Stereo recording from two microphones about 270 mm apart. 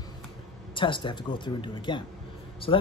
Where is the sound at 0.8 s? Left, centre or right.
Centre.